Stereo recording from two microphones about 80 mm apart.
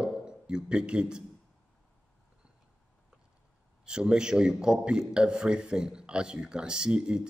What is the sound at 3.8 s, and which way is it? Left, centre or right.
A man's voice, centre.